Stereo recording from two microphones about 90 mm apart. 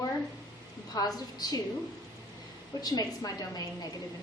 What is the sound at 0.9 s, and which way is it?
Speech, 45° left (ahead or behind).